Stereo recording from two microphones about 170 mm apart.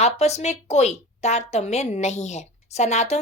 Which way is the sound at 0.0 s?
40° left (ahead or behind).